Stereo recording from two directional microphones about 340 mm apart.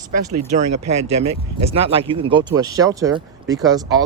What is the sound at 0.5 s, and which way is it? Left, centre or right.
Speech, centre.